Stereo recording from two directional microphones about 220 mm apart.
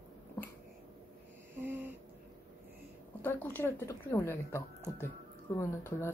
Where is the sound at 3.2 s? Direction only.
10° left (ahead or behind).